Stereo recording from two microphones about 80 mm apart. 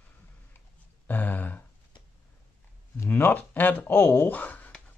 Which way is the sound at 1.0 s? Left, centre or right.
Left.